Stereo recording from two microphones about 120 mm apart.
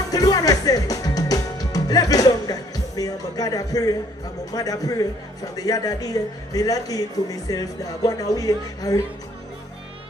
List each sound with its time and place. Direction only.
0.1 s a man's voice: 30° left (ahead or behind)